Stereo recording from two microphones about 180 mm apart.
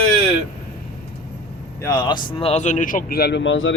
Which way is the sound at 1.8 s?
25° left (ahead or behind).